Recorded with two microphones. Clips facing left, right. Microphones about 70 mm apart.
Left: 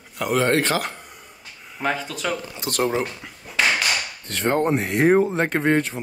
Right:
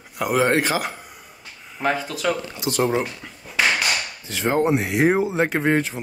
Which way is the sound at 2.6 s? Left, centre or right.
Left.